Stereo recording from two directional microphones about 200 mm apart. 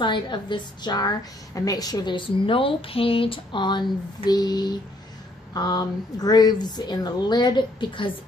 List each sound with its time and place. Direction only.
0.0 s speech: 25° left (ahead or behind)